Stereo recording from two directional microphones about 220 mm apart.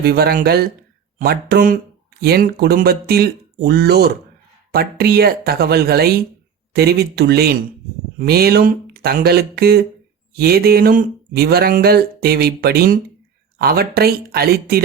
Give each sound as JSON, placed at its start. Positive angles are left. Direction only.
{"t": 0.0, "sound": "speech", "side_deg": -45}